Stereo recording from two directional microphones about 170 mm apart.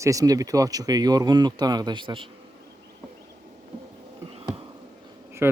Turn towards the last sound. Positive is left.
turn(degrees=-15)  # may be behind; listen again after turning